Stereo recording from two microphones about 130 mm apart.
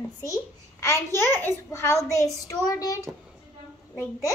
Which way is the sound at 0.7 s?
20° left (ahead or behind).